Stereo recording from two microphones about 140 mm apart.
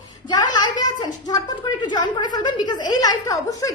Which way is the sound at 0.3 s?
30° left (ahead or behind).